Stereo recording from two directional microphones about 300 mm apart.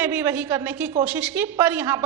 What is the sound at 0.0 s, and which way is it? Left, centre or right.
A woman's voice, centre.